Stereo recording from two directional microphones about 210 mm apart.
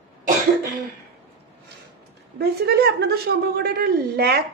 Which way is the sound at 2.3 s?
50° right (ahead or behind).